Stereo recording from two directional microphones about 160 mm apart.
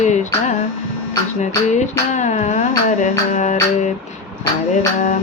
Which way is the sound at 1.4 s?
50° left (ahead or behind).